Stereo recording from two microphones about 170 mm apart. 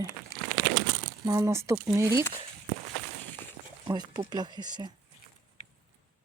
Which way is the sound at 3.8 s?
25° right (ahead or behind).